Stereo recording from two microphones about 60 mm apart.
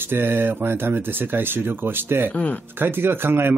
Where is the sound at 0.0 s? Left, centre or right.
Right.